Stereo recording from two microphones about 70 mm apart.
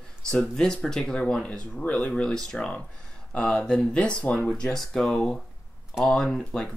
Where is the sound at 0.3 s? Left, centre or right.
Centre.